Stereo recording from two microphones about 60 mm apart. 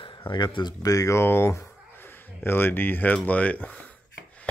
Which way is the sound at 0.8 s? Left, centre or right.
Left.